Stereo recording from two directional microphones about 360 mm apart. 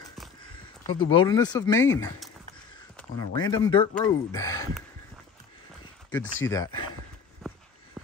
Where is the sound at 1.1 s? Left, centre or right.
Centre.